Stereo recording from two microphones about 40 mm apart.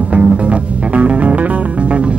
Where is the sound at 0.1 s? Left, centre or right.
Right.